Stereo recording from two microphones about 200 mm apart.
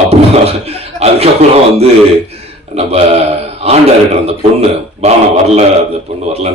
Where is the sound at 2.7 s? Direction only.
30° right (ahead or behind).